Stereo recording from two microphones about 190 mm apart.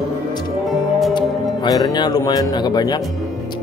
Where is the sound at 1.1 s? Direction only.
20° left (ahead or behind).